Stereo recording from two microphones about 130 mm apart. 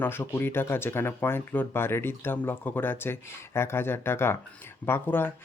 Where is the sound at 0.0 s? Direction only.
15° left (ahead or behind).